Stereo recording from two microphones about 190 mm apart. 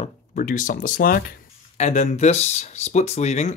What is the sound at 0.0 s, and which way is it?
Speech, 45° left (ahead or behind).